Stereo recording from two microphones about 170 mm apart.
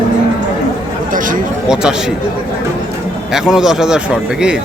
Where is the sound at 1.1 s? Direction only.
50° right (ahead or behind).